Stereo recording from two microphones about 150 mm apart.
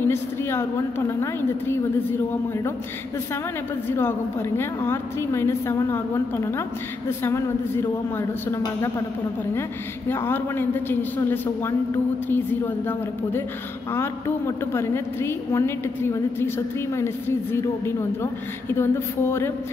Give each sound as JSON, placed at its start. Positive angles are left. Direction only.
{"t": 0.0, "sound": "a woman's voice", "side_deg": 15}
{"t": 3.9, "sound": "a woman's voice", "side_deg": 15}